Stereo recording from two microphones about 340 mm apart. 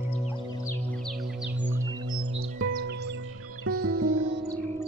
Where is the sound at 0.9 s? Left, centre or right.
Centre.